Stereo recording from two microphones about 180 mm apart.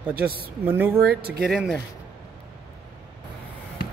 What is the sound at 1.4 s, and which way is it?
Speech, centre (ahead or behind).